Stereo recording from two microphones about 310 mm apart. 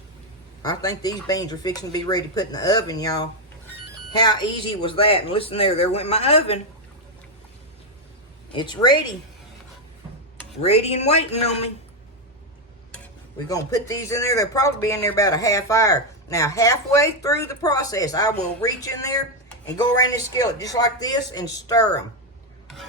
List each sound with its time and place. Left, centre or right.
0.6 s speech: centre
8.5 s speech: centre
10.6 s a man's voice: left
13.5 s speech: centre